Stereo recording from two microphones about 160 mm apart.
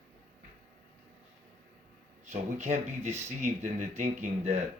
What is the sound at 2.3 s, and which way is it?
Speech, 45° right (ahead or behind).